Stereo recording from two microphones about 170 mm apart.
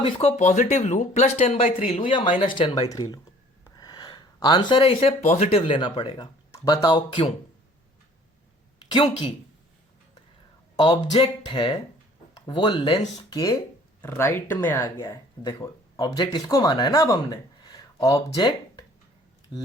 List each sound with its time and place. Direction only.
0.0 s speech: 35° left (ahead or behind)
8.8 s a sound: 30° left (ahead or behind)
10.8 s speech: 25° left (ahead or behind)